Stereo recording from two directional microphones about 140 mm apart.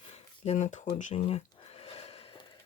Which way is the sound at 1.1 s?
45° left (ahead or behind).